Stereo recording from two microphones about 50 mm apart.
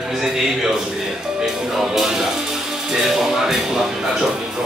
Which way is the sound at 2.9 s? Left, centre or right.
Centre.